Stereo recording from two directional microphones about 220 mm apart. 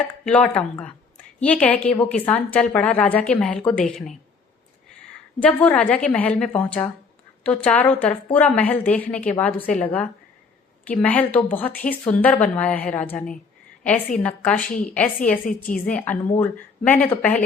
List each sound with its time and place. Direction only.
0.3 s a woman's voice: 5° left (ahead or behind)
5.4 s a woman's voice: 5° left (ahead or behind)
15.4 s a woman's voice: 35° left (ahead or behind)
15.9 s a woman's voice: 5° left (ahead or behind)